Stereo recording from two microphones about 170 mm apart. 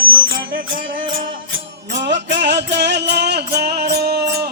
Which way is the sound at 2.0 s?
90° right.